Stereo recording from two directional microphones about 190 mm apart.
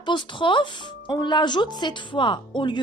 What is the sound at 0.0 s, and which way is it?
Speech, 25° left (ahead or behind).